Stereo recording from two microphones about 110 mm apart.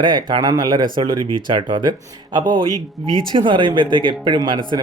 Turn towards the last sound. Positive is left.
turn(degrees=-45)  # may be behind; listen again after turning